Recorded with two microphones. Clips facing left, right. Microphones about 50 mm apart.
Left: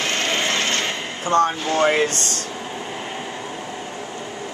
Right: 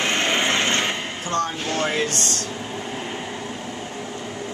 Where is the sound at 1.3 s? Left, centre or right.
Left.